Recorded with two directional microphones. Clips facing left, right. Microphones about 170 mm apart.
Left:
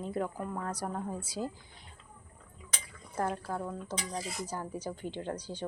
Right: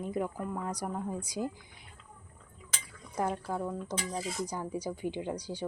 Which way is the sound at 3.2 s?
10° right (ahead or behind).